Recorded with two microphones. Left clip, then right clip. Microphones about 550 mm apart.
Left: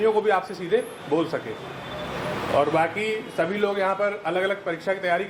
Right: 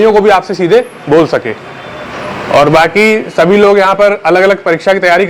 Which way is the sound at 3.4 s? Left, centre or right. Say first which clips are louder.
Right 18 dB; right.